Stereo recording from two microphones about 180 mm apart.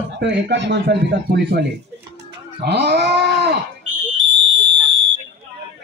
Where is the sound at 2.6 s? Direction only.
65° right (ahead or behind).